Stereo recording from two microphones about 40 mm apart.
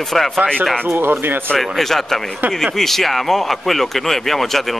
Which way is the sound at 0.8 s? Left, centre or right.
Right.